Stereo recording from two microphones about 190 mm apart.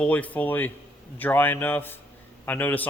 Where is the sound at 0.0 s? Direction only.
10° left (ahead or behind).